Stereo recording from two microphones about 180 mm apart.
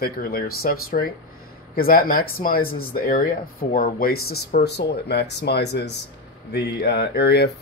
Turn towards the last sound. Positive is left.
turn(degrees=60)  # may be behind; listen again after turning